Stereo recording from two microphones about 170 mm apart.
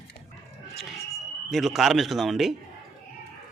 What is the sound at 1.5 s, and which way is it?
Speech, centre (ahead or behind).